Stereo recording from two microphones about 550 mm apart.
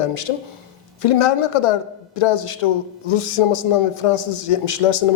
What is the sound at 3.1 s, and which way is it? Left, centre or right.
A man's voice, left.